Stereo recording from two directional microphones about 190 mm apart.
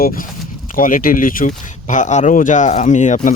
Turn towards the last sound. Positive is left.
turn(degrees=40)  # may be behind; listen again after turning